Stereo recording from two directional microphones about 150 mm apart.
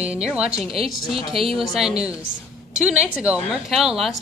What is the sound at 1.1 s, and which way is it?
Speech, 40° right (ahead or behind).